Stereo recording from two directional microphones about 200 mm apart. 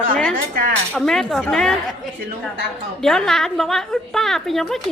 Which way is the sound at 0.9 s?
Centre (ahead or behind).